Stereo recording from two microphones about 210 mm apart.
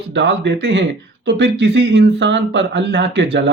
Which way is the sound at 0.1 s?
55° right (ahead or behind).